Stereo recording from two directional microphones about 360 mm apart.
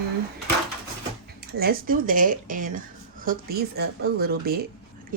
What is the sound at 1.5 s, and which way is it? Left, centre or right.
Speech, right.